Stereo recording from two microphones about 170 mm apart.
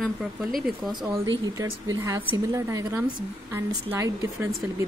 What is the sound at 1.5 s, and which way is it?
Speech, 15° right (ahead or behind).